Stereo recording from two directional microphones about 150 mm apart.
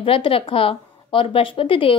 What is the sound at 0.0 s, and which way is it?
A woman's voice, 35° left (ahead or behind).